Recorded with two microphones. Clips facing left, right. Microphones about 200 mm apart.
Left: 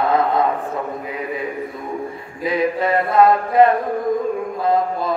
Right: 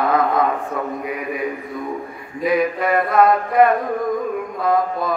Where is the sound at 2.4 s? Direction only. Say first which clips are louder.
Right 1 dB; 25° left (ahead or behind).